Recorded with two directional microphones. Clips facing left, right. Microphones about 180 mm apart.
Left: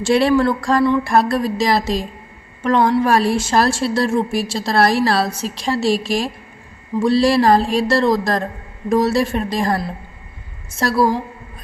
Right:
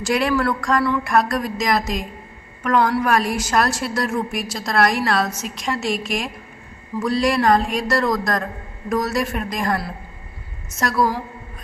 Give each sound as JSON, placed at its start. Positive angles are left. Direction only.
{"t": 0.0, "sound": "a woman's voice", "side_deg": 30}